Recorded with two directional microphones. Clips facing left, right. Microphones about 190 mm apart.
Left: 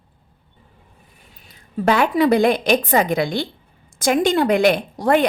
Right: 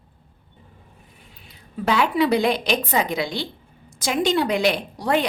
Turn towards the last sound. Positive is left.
turn(degrees=50)  # may be behind; listen again after turning